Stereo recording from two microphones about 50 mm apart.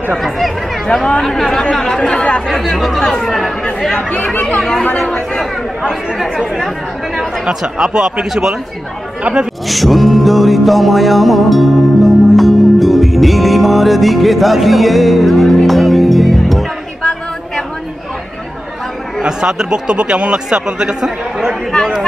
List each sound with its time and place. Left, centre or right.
1.2 s speech: centre
2.4 s speech: centre
4.6 s speech: centre
4.8 s speech: left
5.9 s speech: centre
7.4 s a man's voice: centre
9.7 s music: centre
19.2 s speech: centre